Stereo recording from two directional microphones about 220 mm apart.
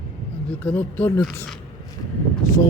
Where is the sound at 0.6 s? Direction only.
5° left (ahead or behind).